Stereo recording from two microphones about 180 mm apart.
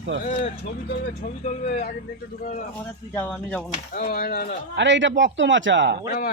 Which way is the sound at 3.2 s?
10° left (ahead or behind).